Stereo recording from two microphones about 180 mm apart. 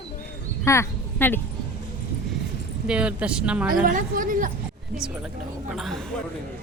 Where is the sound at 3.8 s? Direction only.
50° right (ahead or behind).